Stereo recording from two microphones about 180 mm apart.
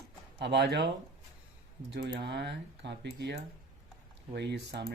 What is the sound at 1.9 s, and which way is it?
A man's voice, 70° right (ahead or behind).